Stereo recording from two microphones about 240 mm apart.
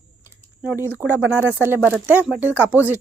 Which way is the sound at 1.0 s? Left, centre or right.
Centre.